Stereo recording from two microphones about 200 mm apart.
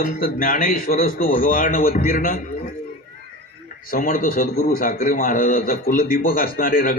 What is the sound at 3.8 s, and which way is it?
A man's voice, 40° left (ahead or behind).